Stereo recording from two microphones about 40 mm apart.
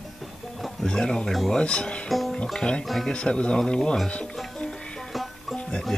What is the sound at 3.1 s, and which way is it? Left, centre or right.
Speech, left.